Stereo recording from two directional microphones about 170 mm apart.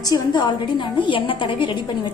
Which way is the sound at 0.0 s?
25° left (ahead or behind).